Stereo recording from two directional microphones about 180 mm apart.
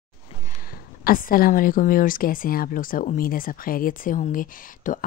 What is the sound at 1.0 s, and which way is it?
Speech, 55° left (ahead or behind).